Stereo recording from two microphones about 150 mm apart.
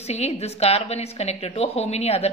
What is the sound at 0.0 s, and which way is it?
A woman's voice, 45° left (ahead or behind).